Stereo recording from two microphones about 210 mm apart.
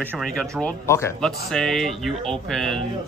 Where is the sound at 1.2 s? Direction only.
Centre (ahead or behind).